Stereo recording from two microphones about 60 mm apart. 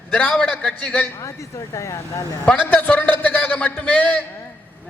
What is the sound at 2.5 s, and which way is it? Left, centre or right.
A man's voice, left.